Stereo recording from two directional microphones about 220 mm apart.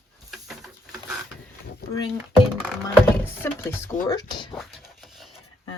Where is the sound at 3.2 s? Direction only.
10° left (ahead or behind).